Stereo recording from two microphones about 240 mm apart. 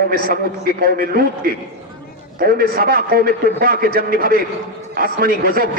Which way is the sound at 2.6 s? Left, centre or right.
Right.